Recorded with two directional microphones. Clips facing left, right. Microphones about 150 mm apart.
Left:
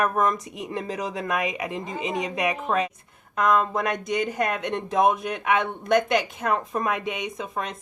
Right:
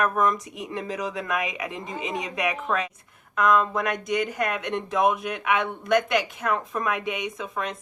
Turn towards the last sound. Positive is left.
turn(degrees=30)  # may be behind; listen again after turning